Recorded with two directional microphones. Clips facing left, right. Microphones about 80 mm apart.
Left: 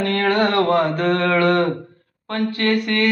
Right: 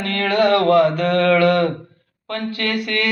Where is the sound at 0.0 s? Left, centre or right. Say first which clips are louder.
Even; left.